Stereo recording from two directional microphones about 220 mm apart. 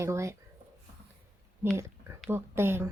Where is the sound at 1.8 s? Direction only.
10° right (ahead or behind).